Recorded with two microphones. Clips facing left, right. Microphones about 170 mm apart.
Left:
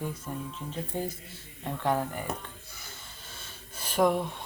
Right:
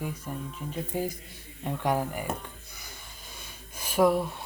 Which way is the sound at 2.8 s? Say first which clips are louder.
Right 1 dB; 15° right (ahead or behind).